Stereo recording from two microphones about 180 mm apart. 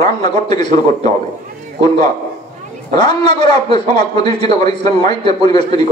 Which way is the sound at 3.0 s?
25° left (ahead or behind).